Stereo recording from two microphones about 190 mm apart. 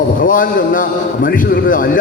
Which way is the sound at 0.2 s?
45° left (ahead or behind).